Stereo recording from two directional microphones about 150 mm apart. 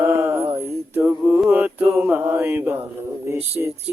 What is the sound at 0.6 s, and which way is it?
Mantra, 10° right (ahead or behind).